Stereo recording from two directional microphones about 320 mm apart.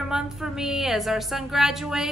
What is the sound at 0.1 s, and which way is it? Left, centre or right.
A woman's voice, centre.